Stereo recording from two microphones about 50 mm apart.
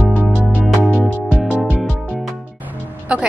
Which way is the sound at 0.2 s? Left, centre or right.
Right.